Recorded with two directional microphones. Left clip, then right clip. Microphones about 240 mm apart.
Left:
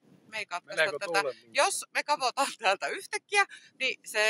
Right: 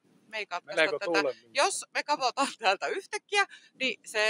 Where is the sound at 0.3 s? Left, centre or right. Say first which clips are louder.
Right 1 dB; centre.